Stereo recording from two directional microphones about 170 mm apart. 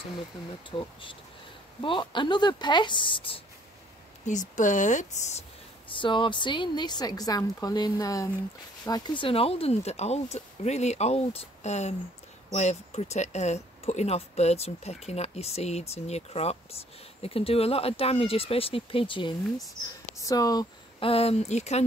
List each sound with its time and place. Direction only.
0.7 s a woman's voice: 30° left (ahead or behind)
4.3 s speech: 45° left (ahead or behind)
5.9 s a woman's voice: 30° left (ahead or behind)
21.1 s speech: 35° left (ahead or behind)